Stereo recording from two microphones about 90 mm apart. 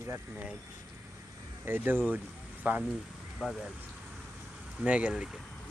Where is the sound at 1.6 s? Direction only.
25° right (ahead or behind).